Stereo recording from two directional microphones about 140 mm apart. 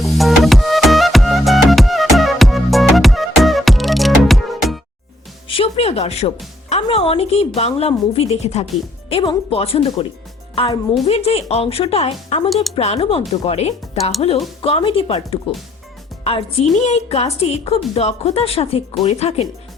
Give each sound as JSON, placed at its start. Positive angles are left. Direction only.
{"t": 0.0, "sound": "music", "side_deg": 0}
{"t": 5.5, "sound": "music", "side_deg": 40}
{"t": 6.8, "sound": "a woman's voice", "side_deg": 40}